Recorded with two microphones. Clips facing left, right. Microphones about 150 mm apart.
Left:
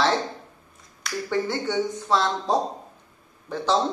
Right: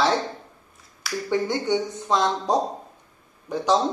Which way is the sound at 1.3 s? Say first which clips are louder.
Right 3 dB; 15° right (ahead or behind).